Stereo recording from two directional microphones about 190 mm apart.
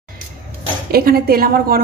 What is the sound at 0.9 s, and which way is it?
Speech, 55° right (ahead or behind).